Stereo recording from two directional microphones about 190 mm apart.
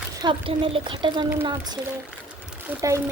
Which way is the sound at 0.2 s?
25° right (ahead or behind).